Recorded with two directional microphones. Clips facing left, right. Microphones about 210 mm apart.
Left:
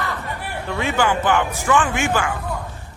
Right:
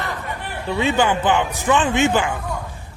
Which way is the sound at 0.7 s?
20° right (ahead or behind).